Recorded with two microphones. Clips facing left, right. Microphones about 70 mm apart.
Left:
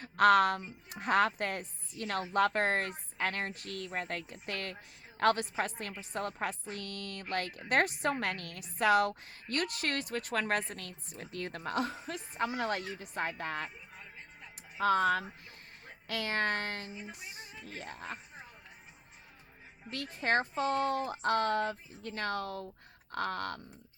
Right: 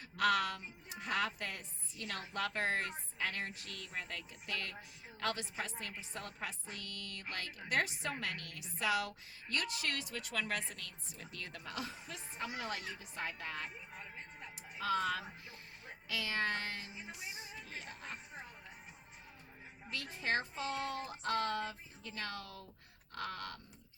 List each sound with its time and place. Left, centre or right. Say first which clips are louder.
0.0 s speech: left 9 dB; left
13.9 s music: right 1 dB; centre
14.8 s speech: left 8 dB; left
16.9 s a sound: left 2 dB; centre
17.7 s speech: left 6 dB; left
20.1 s speech: left 7 dB; left